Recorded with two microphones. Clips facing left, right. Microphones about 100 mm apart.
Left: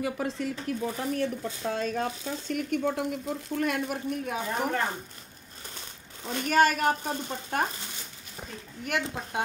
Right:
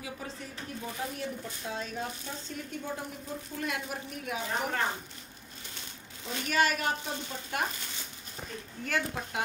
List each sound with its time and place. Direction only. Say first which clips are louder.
0.0 s speech: left 11 dB; 85° left; by 3.1 s 65° left (ahead or behind)
3.5 s speech: left 7 dB; 50° left (ahead or behind)
6.2 s speech: left 5 dB; 45° left (ahead or behind)
8.4 s a woman's voice: even; 15° left (ahead or behind)